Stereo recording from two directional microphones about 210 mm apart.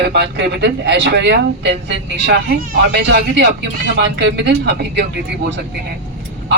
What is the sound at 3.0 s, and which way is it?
A man's voice, 55° right (ahead or behind).